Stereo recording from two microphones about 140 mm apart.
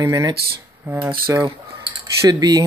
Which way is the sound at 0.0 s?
25° right (ahead or behind).